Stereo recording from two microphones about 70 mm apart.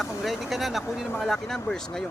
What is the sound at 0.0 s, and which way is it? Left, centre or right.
Speech, centre.